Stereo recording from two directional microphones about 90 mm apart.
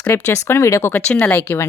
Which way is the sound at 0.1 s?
30° left (ahead or behind).